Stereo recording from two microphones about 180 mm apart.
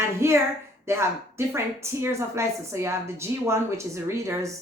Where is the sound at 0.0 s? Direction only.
15° right (ahead or behind).